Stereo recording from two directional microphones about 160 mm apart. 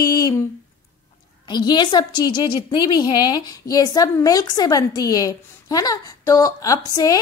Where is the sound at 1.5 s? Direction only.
25° left (ahead or behind).